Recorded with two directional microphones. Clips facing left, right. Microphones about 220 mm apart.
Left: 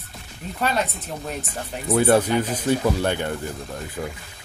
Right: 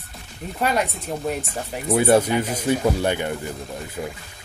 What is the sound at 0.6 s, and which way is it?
Speech, 10° right (ahead or behind).